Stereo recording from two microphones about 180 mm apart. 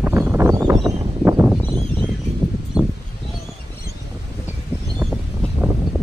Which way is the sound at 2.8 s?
5° right (ahead or behind).